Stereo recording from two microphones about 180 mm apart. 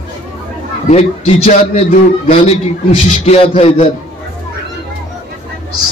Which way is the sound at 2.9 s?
35° left (ahead or behind).